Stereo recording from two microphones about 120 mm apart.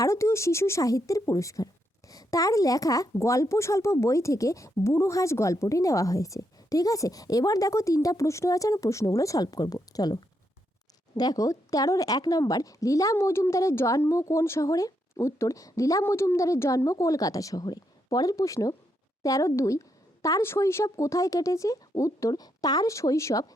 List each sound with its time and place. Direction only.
0.0 s speech: 25° left (ahead or behind)